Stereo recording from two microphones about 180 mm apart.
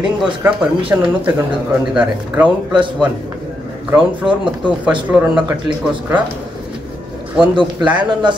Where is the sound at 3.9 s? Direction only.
5° right (ahead or behind).